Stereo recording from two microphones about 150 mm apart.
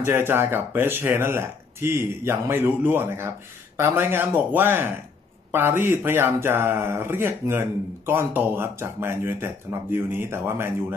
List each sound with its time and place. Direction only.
0.0 s speech: 15° right (ahead or behind)